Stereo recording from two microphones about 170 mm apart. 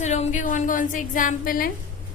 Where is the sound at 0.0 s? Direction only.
40° left (ahead or behind).